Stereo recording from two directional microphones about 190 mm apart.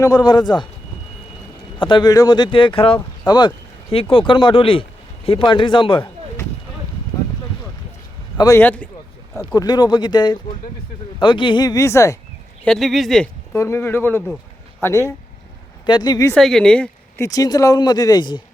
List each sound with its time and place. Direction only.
0.0 s a man's voice: 20° left (ahead or behind)
1.8 s a man's voice: 25° left (ahead or behind)
8.4 s speech: 15° left (ahead or behind)
9.5 s a man's voice: 20° left (ahead or behind)
12.6 s speech: centre (ahead or behind)
13.5 s a man's voice: 15° left (ahead or behind)
16.3 s speech: 5° left (ahead or behind)
17.2 s a man's voice: 20° left (ahead or behind)